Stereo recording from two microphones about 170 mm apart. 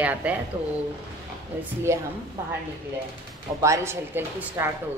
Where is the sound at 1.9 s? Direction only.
15° right (ahead or behind).